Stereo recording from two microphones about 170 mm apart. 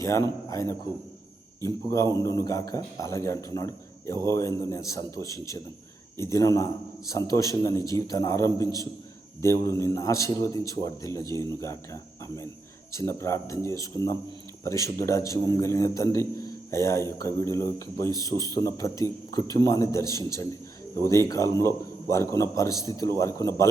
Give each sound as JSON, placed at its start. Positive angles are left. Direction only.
{"t": 0.0, "sound": "a man's voice", "side_deg": 15}